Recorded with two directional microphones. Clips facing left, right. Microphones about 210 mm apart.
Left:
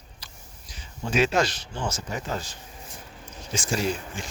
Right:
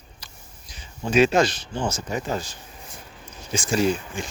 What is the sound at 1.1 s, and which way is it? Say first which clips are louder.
Speech: right 5 dB; 20° right (ahead or behind).